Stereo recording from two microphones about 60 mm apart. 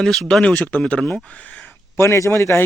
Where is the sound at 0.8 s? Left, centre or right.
Centre.